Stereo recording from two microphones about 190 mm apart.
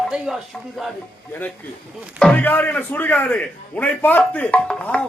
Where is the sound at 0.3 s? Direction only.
Centre (ahead or behind).